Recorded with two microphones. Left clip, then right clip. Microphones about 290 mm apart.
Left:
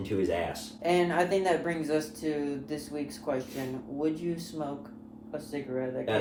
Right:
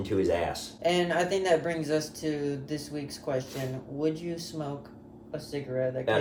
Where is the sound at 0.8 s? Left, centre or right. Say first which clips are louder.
Even; centre.